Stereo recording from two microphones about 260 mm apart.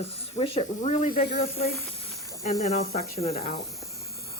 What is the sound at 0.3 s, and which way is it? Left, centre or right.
Speech, left.